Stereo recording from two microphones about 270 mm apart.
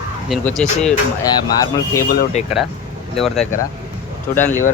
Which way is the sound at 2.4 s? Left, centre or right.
Left.